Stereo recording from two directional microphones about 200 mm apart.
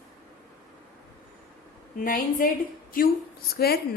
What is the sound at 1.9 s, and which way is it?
A woman's voice, 45° left (ahead or behind).